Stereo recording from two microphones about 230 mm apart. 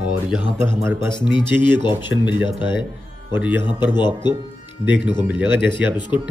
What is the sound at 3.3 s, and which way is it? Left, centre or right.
Speech, centre.